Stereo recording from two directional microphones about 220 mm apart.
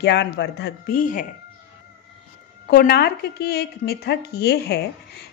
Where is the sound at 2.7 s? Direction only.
45° left (ahead or behind).